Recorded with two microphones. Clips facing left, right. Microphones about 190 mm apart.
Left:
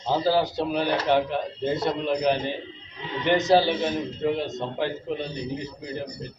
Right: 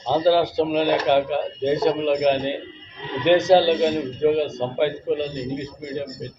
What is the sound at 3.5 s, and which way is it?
A man's voice, 20° right (ahead or behind).